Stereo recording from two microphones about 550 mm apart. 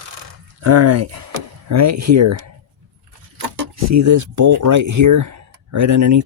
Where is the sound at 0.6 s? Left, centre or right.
Right.